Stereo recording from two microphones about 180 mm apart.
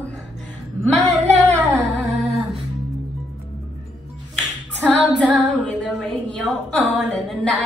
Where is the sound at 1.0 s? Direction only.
40° right (ahead or behind).